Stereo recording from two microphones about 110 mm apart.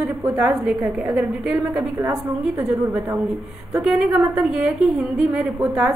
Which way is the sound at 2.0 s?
20° right (ahead or behind).